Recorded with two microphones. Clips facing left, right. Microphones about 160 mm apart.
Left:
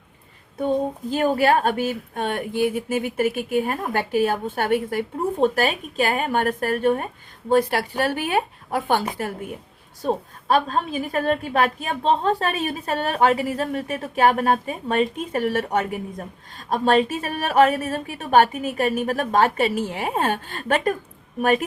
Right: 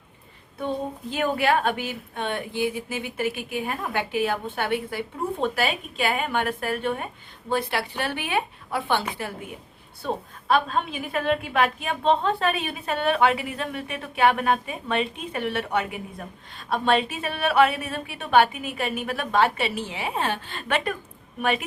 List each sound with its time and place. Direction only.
1.1 s a woman's voice: 40° left (ahead or behind)